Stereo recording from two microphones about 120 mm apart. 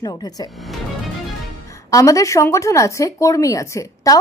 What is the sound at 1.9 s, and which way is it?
Speech, 30° left (ahead or behind).